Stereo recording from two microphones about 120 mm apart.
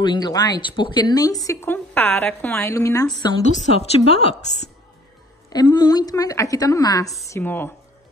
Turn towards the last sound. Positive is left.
turn(degrees=15)  # may be behind; listen again after turning